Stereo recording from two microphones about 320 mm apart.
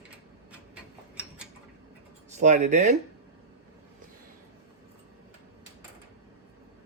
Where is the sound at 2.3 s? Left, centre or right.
Right.